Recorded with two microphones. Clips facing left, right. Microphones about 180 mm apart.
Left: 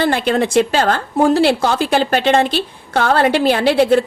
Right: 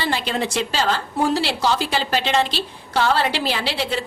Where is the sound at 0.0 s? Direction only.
55° left (ahead or behind).